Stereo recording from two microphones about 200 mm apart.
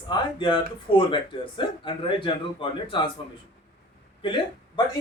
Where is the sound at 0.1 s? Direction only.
25° left (ahead or behind).